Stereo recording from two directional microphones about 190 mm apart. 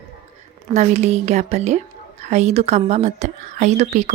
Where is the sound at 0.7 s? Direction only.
35° right (ahead or behind).